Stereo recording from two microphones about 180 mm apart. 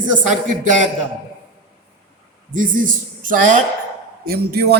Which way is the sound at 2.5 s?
50° right (ahead or behind).